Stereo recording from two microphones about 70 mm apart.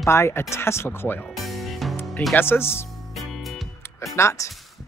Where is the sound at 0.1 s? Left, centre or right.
Left.